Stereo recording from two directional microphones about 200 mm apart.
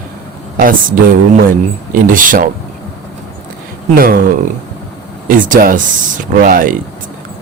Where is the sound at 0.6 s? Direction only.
45° right (ahead or behind).